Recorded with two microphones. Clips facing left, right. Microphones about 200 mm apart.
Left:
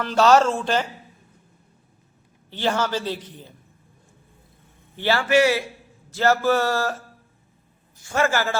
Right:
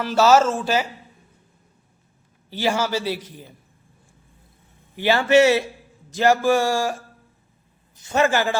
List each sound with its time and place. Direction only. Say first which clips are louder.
0.0 s speech: right 1 dB; 5° right (ahead or behind)
2.5 s a man's voice: right 1 dB; 10° right (ahead or behind)
4.9 s a man's voice: right 3 dB; 15° right (ahead or behind)